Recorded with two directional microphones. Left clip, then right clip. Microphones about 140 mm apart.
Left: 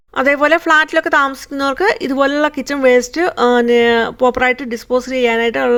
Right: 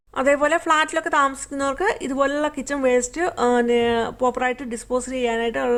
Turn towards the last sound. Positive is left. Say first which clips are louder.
# left 8 dB
turn(degrees=30)  # may be behind; listen again after turning